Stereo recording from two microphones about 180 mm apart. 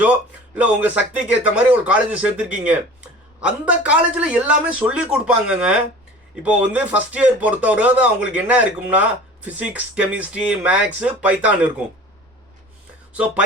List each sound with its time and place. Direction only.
0.5 s speech: 10° right (ahead or behind)